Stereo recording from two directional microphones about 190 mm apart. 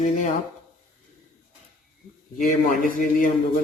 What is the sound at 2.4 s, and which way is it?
Speech, 45° left (ahead or behind).